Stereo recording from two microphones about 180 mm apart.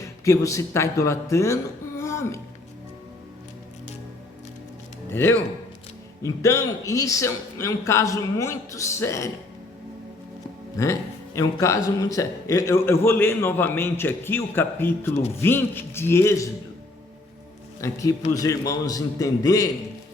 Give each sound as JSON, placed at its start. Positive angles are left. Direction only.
{"t": 0.0, "sound": "a man's voice", "side_deg": 15}
{"t": 2.0, "sound": "music", "side_deg": 15}
{"t": 5.0, "sound": "a man's voice", "side_deg": 10}
{"t": 10.8, "sound": "a man's voice", "side_deg": 15}
{"t": 17.7, "sound": "a man's voice", "side_deg": 15}